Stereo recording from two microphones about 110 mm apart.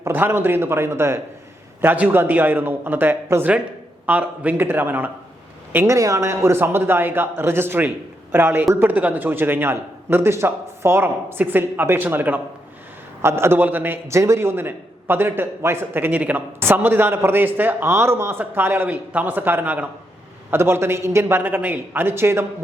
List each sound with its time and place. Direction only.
0.0 s a man's voice: 20° right (ahead or behind)